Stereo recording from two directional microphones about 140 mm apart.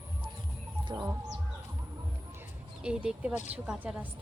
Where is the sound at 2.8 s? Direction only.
5° right (ahead or behind).